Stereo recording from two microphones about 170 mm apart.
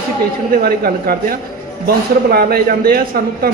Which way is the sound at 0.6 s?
60° right (ahead or behind).